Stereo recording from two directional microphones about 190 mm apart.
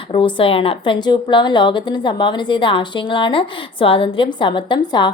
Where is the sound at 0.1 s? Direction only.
25° left (ahead or behind).